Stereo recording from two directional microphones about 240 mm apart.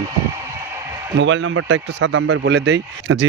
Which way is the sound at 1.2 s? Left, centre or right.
Right.